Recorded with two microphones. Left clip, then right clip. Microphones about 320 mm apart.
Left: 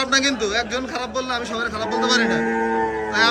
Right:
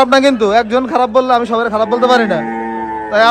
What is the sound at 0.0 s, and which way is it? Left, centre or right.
A man's voice, centre.